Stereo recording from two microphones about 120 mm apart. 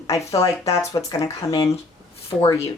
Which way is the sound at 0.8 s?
25° left (ahead or behind).